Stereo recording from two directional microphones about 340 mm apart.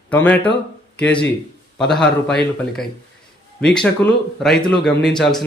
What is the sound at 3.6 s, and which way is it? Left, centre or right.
Speech, centre.